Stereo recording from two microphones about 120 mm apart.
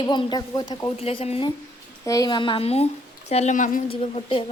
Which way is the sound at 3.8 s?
50° left (ahead or behind).